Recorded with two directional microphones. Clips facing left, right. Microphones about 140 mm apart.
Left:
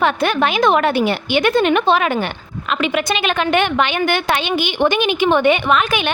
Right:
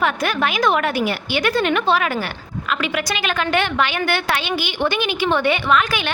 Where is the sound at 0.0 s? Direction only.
25° left (ahead or behind).